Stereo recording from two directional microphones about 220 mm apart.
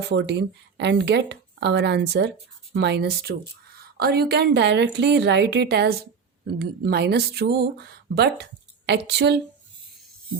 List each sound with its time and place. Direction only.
0.1 s a woman's voice: 50° right (ahead or behind)